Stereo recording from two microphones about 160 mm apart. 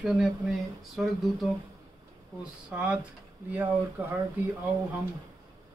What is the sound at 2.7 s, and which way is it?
Speech, 5° right (ahead or behind).